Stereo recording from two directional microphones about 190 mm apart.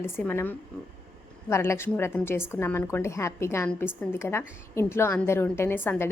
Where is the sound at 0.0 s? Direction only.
10° left (ahead or behind).